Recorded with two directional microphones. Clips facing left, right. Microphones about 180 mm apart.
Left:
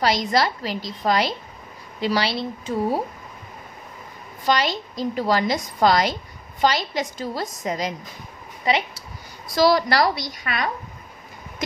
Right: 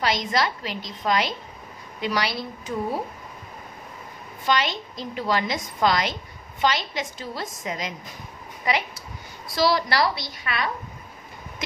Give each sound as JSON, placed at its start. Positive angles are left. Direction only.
{"t": 0.0, "sound": "a woman's voice", "side_deg": 35}
{"t": 4.5, "sound": "a woman's voice", "side_deg": 40}
{"t": 8.7, "sound": "a woman's voice", "side_deg": 25}
{"t": 9.6, "sound": "a woman's voice", "side_deg": 45}